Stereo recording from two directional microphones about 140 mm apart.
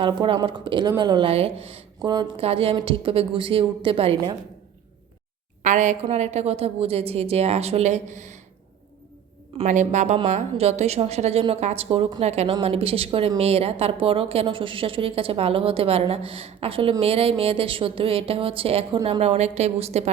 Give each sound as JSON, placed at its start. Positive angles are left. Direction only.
{"t": 0.0, "sound": "a woman's voice", "side_deg": -35}
{"t": 5.6, "sound": "a woman's voice", "side_deg": -60}
{"t": 9.6, "sound": "a woman's voice", "side_deg": -60}